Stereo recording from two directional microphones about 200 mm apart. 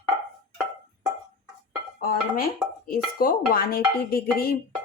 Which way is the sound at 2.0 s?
45° left (ahead or behind).